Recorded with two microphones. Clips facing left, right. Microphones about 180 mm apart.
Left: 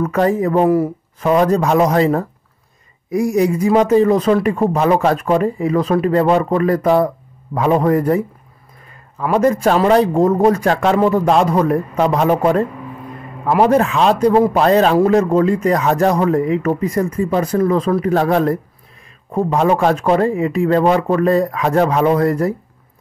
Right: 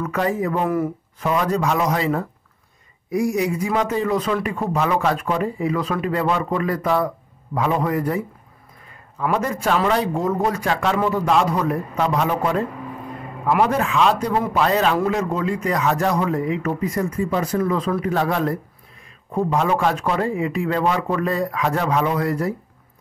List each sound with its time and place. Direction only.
0.0 s a man's voice: 40° left (ahead or behind)
1.2 s a man's voice: 45° left (ahead or behind)
9.2 s a man's voice: 40° left (ahead or behind)